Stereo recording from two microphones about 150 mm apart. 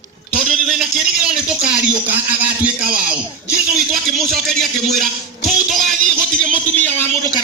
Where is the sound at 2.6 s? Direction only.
5° right (ahead or behind).